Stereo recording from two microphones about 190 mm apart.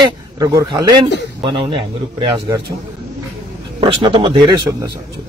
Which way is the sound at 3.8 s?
25° right (ahead or behind).